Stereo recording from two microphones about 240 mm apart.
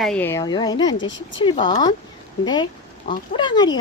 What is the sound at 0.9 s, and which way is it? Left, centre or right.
Speech, left.